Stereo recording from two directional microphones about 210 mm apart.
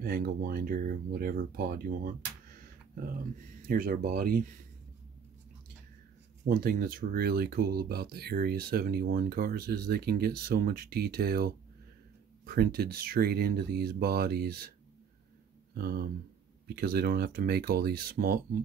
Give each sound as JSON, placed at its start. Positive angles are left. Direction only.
{"t": 0.0, "sound": "speech", "side_deg": -45}
{"t": 3.6, "sound": "speech", "side_deg": -45}
{"t": 6.4, "sound": "speech", "side_deg": -45}
{"t": 15.7, "sound": "speech", "side_deg": -45}